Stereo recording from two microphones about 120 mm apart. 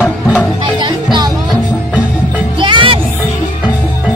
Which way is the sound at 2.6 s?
45° right (ahead or behind).